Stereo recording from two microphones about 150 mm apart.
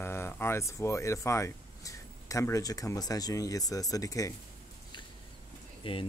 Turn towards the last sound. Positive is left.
turn(degrees=35)  # may be behind; listen again after turning